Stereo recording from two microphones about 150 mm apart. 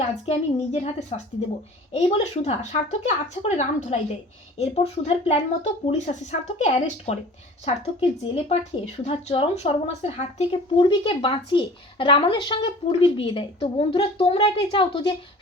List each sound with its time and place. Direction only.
0.3 s speech: 45° left (ahead or behind)
10.8 s speech: 35° left (ahead or behind)